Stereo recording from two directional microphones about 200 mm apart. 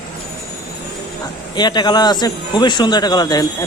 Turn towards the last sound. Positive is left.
turn(degrees=20)  # may be behind; listen again after turning